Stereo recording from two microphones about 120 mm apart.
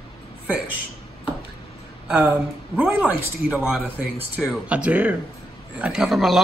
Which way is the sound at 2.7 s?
10° right (ahead or behind).